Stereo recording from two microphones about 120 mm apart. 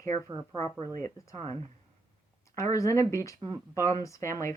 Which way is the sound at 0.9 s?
30° left (ahead or behind).